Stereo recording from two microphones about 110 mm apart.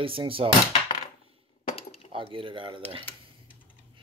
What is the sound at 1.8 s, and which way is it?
Cutlery, 65° left (ahead or behind).